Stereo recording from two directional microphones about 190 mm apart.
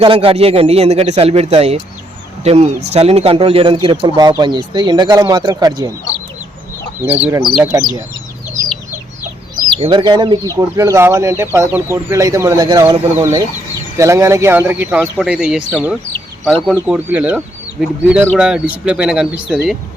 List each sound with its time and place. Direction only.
0.0 s speech: 30° right (ahead or behind)
7.0 s speech: 10° right (ahead or behind)
9.8 s speech: 25° right (ahead or behind); by 19.7 s 5° right (ahead or behind)